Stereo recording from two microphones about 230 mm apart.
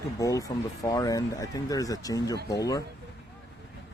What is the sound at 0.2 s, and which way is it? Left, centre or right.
Speech, centre.